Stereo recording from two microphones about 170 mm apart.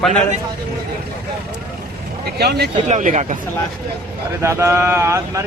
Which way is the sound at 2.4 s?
70° right (ahead or behind).